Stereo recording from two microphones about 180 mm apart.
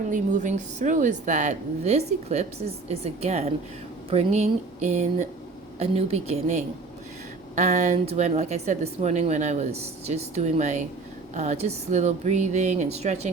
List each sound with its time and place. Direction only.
0.1 s a woman's voice: 45° right (ahead or behind)